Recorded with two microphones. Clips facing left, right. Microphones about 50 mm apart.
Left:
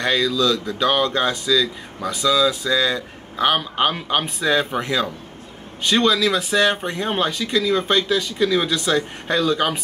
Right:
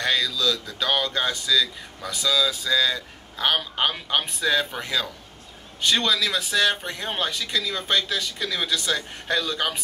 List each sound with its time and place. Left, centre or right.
0.0 s speech: centre